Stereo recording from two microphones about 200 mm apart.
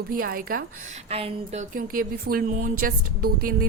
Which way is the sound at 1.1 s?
30° right (ahead or behind).